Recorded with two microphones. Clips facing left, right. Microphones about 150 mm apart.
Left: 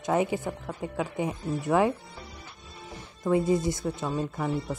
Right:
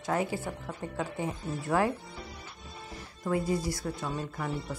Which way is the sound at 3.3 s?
20° left (ahead or behind).